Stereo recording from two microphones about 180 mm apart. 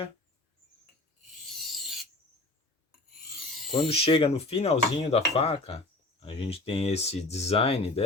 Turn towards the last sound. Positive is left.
turn(degrees=30)  # may be behind; listen again after turning